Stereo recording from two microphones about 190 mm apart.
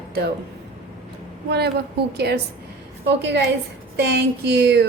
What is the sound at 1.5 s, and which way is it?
A woman's voice, 60° right (ahead or behind).